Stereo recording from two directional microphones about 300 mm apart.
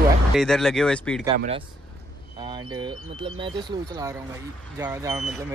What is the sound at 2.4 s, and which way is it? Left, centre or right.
Speech, centre.